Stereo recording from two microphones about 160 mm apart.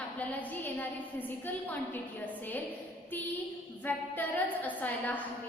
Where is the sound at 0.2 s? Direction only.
10° left (ahead or behind).